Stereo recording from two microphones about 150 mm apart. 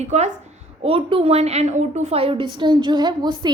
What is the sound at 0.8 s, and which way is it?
A woman's voice, 40° right (ahead or behind).